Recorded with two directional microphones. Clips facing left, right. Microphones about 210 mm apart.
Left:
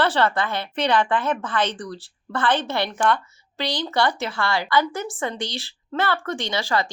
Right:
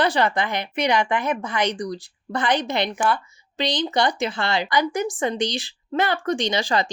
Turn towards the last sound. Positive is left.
turn(degrees=-15)  # may be behind; listen again after turning